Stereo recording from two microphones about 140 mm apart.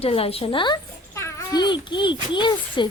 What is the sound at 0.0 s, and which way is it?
Speech, 45° left (ahead or behind).